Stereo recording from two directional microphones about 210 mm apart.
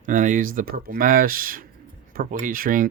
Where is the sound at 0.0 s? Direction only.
40° right (ahead or behind).